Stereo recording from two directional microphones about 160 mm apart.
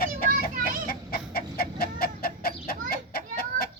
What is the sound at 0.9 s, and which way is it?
Chicken, 70° left (ahead or behind).